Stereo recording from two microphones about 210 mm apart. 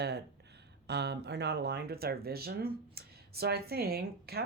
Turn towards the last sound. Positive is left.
turn(degrees=-50)  # may be behind; listen again after turning